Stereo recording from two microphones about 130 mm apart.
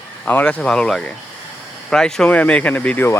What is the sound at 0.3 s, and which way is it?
Speech, 10° left (ahead or behind).